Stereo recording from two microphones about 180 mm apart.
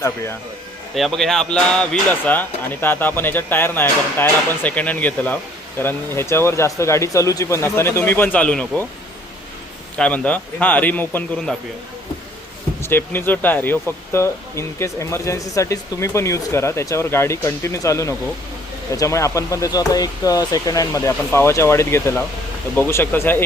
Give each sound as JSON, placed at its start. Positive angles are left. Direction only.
{"t": 0.9, "sound": "speech", "side_deg": 0}
{"t": 10.0, "sound": "speech", "side_deg": 10}
{"t": 12.8, "sound": "speech", "side_deg": 15}